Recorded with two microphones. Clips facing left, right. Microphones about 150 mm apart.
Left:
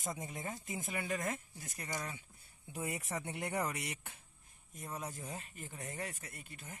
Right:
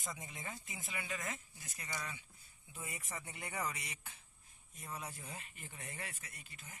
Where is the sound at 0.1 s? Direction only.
45° left (ahead or behind).